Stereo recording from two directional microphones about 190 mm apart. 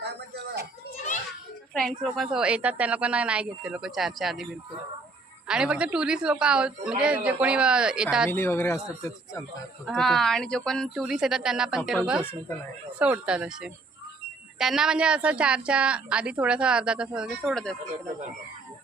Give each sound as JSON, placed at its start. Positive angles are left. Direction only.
{"t": 0.0, "sound": "a sound", "side_deg": -60}
{"t": 1.7, "sound": "a woman's voice", "side_deg": 0}
{"t": 5.5, "sound": "a woman's voice", "side_deg": -5}
{"t": 8.3, "sound": "speech", "side_deg": 10}
{"t": 9.8, "sound": "a woman's voice", "side_deg": 0}